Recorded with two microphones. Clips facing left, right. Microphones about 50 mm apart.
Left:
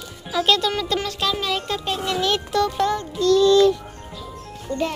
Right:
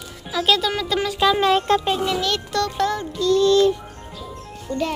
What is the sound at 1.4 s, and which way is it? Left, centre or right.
Speech, right.